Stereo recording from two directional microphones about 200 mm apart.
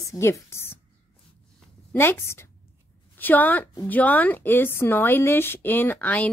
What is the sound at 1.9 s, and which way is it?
A woman's voice, 10° left (ahead or behind).